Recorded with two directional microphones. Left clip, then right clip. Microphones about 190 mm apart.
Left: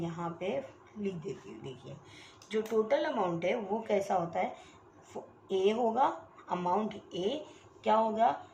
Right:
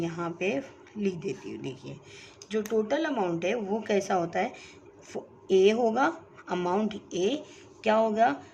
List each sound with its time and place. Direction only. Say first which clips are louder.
0.0 s speech: right 6 dB; 50° right (ahead or behind)
2.5 s speech: right 2 dB; 40° right (ahead or behind)
7.9 s speech: right 4 dB; 60° right (ahead or behind)